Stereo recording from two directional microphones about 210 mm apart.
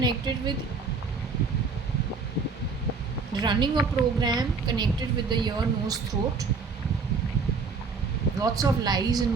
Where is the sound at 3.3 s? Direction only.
20° right (ahead or behind).